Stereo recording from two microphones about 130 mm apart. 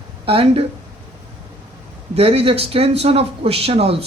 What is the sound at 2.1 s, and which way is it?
Speech, 50° right (ahead or behind).